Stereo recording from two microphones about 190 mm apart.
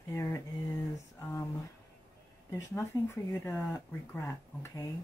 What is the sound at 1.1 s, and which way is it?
Speech, 15° left (ahead or behind).